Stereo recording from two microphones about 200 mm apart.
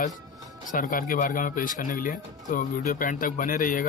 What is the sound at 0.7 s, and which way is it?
Speech, 45° left (ahead or behind).